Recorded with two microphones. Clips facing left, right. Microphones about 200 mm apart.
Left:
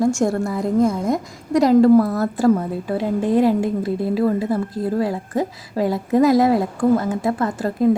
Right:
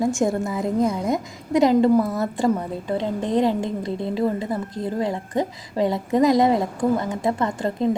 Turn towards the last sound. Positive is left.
turn(degrees=5)  # may be behind; listen again after turning